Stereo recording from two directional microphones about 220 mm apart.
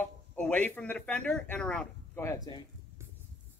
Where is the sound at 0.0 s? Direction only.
10° left (ahead or behind).